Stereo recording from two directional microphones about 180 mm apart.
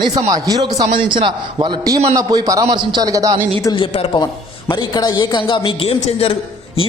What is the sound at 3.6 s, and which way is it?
A man's voice, 20° left (ahead or behind).